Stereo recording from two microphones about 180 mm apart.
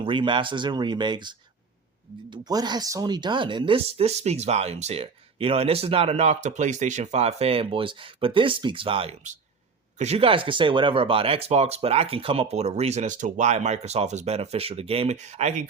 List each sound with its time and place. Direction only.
0.0 s speech: 25° right (ahead or behind)